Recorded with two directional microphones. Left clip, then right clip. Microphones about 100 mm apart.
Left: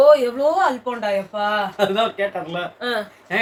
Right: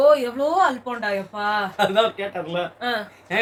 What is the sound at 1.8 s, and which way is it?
Speech, 45° right (ahead or behind).